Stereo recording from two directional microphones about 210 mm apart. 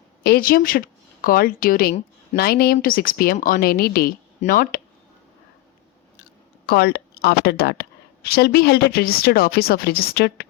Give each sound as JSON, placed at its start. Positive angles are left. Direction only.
{"t": 0.2, "sound": "speech", "side_deg": 45}
{"t": 6.7, "sound": "speech", "side_deg": 50}